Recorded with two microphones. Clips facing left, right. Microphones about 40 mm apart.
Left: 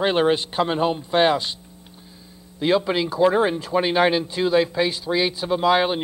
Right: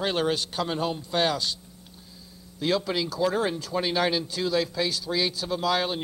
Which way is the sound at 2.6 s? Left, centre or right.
Left.